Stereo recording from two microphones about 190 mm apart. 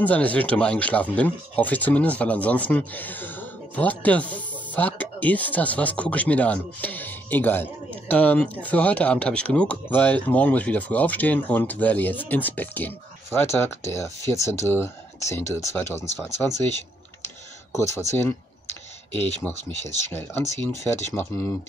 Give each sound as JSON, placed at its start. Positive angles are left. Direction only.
{"t": 0.0, "sound": "speech", "side_deg": 5}
{"t": 17.7, "sound": "speech", "side_deg": 15}
{"t": 19.1, "sound": "speech", "side_deg": 35}
{"t": 20.1, "sound": "speech", "side_deg": 10}